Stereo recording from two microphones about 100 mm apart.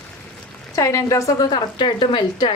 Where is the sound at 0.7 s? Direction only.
30° left (ahead or behind); by 2.5 s 55° left (ahead or behind).